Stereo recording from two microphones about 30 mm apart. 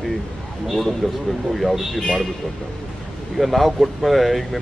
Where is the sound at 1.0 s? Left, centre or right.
Left.